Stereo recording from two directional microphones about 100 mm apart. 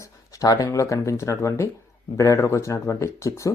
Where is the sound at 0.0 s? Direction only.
35° left (ahead or behind).